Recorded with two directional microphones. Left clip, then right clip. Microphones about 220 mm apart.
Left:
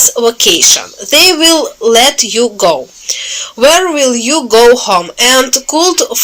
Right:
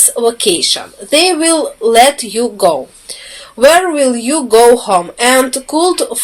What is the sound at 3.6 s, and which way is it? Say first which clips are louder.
Speech: even; 25° left (ahead or behind).